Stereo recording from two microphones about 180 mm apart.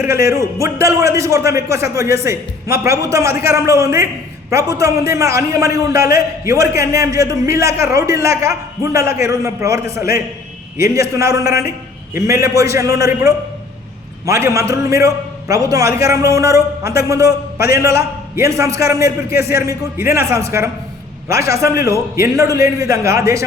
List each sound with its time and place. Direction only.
0.0 s a man's voice: 15° right (ahead or behind)
10.9 s a man's voice: 15° right (ahead or behind)